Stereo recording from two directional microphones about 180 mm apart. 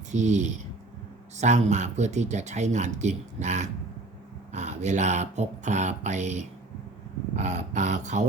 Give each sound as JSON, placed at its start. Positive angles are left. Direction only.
{"t": 0.1, "sound": "speech", "side_deg": -40}